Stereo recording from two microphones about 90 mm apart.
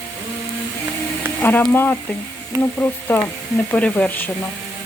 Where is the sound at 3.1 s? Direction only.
20° left (ahead or behind).